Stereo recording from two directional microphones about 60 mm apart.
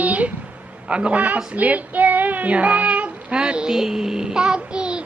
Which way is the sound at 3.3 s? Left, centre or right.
Centre.